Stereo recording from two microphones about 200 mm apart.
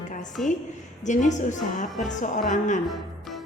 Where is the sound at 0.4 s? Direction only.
Centre (ahead or behind).